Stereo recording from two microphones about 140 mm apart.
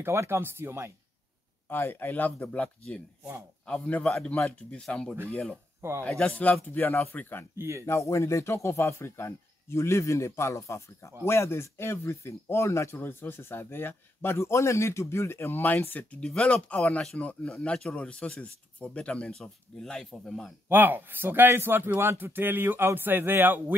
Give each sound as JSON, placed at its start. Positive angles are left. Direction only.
{"t": 0.0, "sound": "speech", "side_deg": -20}
{"t": 1.7, "sound": "speech", "side_deg": 15}
{"t": 5.8, "sound": "speech", "side_deg": -20}
{"t": 6.0, "sound": "speech", "side_deg": 10}
{"t": 7.5, "sound": "speech", "side_deg": -20}
{"t": 7.8, "sound": "speech", "side_deg": 20}
{"t": 20.6, "sound": "speech", "side_deg": -15}